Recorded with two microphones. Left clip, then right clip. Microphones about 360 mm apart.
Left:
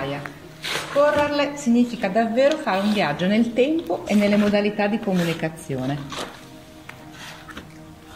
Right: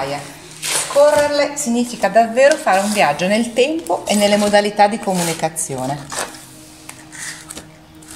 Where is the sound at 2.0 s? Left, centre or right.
Right.